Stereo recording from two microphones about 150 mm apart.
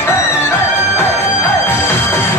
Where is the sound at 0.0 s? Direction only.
15° left (ahead or behind).